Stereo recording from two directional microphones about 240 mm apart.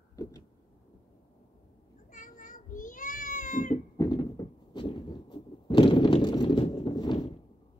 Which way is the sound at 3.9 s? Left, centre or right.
Centre.